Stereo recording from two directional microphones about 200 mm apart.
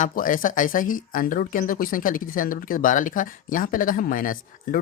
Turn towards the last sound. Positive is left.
turn(degrees=45)  # may be behind; listen again after turning